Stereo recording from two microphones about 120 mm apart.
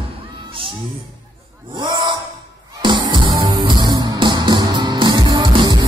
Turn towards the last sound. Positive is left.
turn(degrees=-40)  # may be behind; listen again after turning